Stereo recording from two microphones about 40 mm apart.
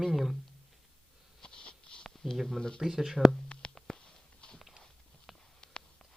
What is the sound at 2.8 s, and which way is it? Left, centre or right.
Speech, centre.